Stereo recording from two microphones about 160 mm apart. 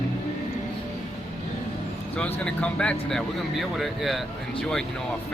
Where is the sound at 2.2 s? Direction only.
10° left (ahead or behind).